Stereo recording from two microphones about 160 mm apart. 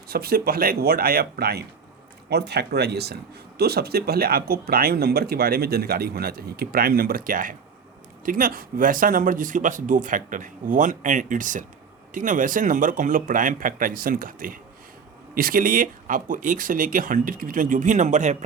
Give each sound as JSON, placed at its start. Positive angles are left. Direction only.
{"t": 0.1, "sound": "speech", "side_deg": -75}
{"t": 2.3, "sound": "speech", "side_deg": -90}
{"t": 3.6, "sound": "speech", "side_deg": -80}